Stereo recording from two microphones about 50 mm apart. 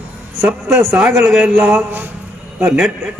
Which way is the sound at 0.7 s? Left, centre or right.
Right.